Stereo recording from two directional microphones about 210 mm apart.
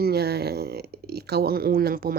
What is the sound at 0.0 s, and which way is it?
Speech, 50° right (ahead or behind).